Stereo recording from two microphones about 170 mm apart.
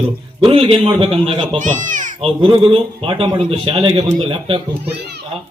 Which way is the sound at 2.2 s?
30° right (ahead or behind).